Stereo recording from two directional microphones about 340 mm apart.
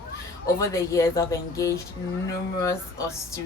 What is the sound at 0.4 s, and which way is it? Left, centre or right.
Speech, centre.